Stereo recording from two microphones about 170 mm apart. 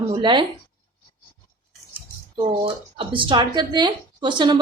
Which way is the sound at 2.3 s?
30° right (ahead or behind).